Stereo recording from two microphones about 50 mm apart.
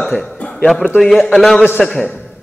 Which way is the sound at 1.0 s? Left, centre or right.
Centre.